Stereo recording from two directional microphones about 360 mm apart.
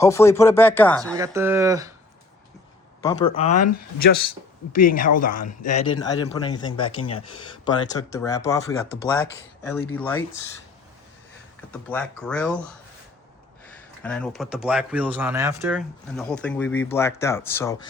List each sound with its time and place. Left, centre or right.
0.0 s speech: centre
1.1 s speech: centre
3.0 s speech: centre
3.5 s speech: left
4.7 s speech: left; by 10.2 s centre
11.9 s speech: centre
14.0 s speech: centre